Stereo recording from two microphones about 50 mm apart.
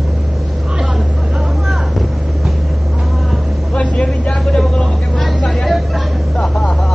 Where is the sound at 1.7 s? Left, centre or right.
Centre.